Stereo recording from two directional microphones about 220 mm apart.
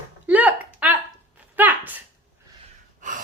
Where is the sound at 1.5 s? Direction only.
10° right (ahead or behind).